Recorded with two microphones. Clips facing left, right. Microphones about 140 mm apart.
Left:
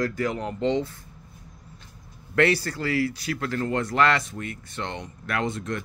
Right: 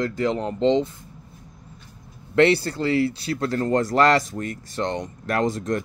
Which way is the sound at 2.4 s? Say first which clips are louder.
Right 4 dB; 25° right (ahead or behind).